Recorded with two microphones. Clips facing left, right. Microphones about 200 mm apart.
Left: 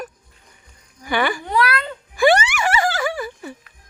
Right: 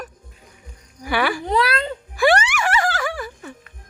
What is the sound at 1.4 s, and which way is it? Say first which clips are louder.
Speech: right 1 dB; 30° right (ahead or behind).